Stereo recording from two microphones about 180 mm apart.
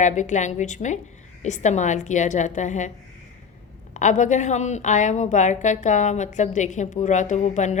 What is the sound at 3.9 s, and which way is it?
A woman's voice, 45° left (ahead or behind).